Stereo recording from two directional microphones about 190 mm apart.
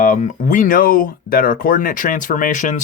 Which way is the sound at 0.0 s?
40° left (ahead or behind).